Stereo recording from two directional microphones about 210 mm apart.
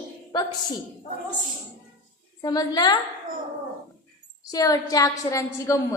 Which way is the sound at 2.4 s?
20° left (ahead or behind).